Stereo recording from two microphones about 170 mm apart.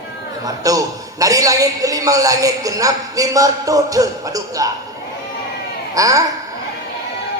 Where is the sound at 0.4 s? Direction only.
20° right (ahead or behind).